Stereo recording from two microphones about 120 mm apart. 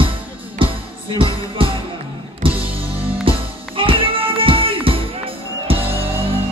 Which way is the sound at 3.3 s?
50° right (ahead or behind).